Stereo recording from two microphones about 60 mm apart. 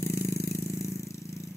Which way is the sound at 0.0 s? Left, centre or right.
Left.